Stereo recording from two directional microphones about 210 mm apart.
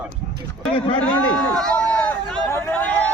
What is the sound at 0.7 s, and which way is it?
Speech, 25° left (ahead or behind).